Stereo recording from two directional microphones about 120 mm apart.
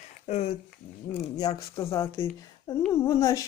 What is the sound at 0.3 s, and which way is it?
Speech, 65° left (ahead or behind).